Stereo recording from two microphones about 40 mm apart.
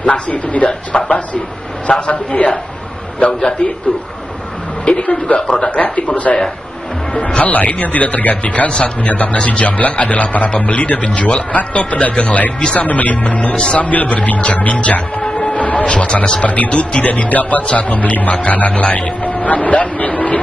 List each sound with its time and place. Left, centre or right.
0.0 s a man's voice: left
0.7 s a man's voice: left
3.2 s speech: left
4.8 s a man's voice: left
6.3 s a man's voice: centre
7.2 s a man's voice: left
11.0 s speech: left
11.5 s a man's voice: left